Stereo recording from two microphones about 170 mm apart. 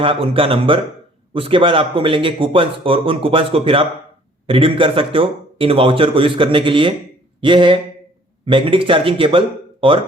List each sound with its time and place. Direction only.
0.0 s speech: 30° right (ahead or behind)